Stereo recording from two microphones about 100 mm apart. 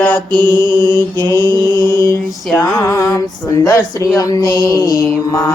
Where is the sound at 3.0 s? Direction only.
35° left (ahead or behind).